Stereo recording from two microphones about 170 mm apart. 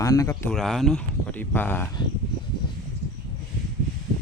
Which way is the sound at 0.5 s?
Centre (ahead or behind).